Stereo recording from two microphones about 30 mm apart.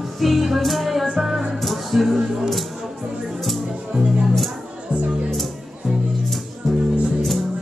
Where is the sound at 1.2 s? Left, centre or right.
Centre.